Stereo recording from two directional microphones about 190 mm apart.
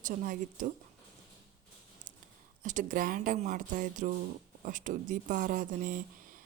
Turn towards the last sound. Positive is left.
turn(degrees=-45)  # may be behind; listen again after turning